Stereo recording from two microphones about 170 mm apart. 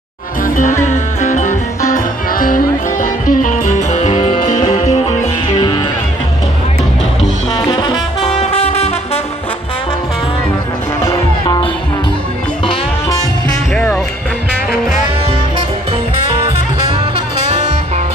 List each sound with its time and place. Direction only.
0.8 s music: 45° left (ahead or behind)
7.5 s music: 30° left (ahead or behind)
11.4 s music: 25° left (ahead or behind)
17.5 s music: 40° right (ahead or behind)